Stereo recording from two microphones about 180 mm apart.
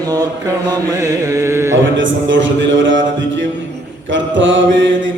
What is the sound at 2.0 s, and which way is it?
Mantra, 90° right.